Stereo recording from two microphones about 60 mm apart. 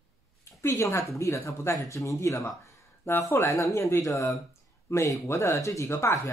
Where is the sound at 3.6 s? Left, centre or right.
Left.